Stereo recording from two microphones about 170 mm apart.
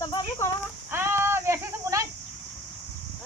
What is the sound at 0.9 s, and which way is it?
Speech, 15° right (ahead or behind).